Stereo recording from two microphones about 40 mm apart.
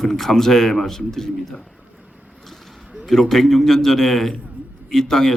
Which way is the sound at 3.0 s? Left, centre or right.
Centre.